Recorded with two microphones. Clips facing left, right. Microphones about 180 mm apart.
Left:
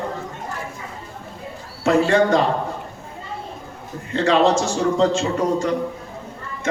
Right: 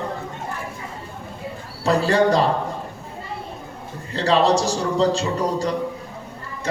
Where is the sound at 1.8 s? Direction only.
35° right (ahead or behind).